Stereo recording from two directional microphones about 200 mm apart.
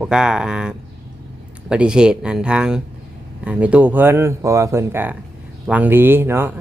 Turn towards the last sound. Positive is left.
turn(degrees=-10)  # may be behind; listen again after turning